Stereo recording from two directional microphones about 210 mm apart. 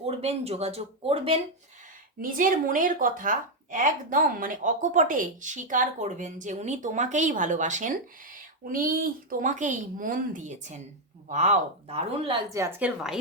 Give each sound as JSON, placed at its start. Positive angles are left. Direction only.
{"t": 0.0, "sound": "speech", "side_deg": -30}
{"t": 2.2, "sound": "speech", "side_deg": -40}
{"t": 12.5, "sound": "a woman's voice", "side_deg": -15}